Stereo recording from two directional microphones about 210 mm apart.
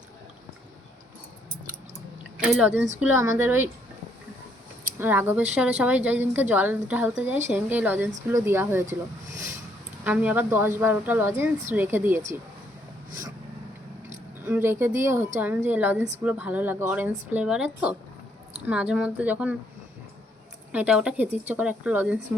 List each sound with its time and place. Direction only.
2.4 s a woman's voice: 5° right (ahead or behind)
4.9 s a woman's voice: 10° right (ahead or behind)
10.0 s a woman's voice: 5° right (ahead or behind)
14.4 s a woman's voice: 10° right (ahead or behind)
20.7 s a woman's voice: 5° right (ahead or behind)